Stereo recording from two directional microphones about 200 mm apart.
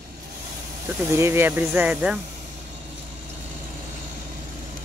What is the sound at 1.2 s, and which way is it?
Speech, 10° right (ahead or behind).